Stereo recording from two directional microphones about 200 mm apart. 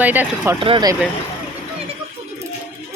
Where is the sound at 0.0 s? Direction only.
10° right (ahead or behind).